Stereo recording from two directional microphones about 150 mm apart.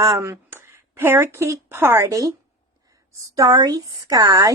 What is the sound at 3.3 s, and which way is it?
Speech, 25° right (ahead or behind).